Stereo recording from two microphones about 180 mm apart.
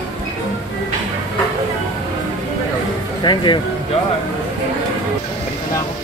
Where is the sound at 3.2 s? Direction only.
25° left (ahead or behind).